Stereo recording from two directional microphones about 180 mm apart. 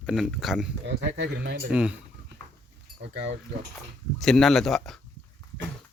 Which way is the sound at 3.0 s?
75° right (ahead or behind).